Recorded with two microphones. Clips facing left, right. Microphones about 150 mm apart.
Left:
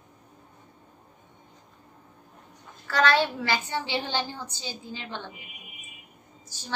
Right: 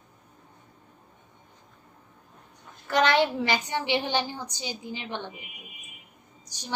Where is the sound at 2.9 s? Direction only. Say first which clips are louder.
Right 1 dB; 20° right (ahead or behind).